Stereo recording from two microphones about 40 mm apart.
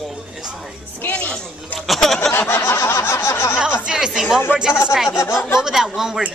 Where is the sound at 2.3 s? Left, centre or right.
Left.